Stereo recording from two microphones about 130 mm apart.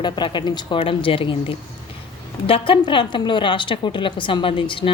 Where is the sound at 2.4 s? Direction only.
45° left (ahead or behind).